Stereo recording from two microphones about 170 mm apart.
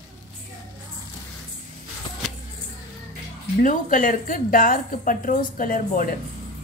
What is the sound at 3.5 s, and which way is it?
A woman's voice, 50° left (ahead or behind).